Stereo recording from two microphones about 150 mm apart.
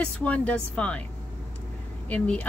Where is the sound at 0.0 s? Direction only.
10° left (ahead or behind).